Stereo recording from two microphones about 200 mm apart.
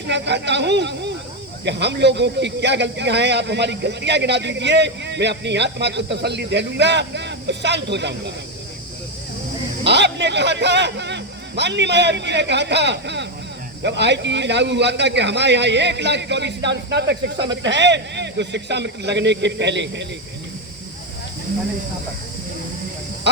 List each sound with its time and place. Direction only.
0.1 s speech: 60° right (ahead or behind)
9.8 s a man's voice: 60° right (ahead or behind)
23.3 s snake: 60° right (ahead or behind)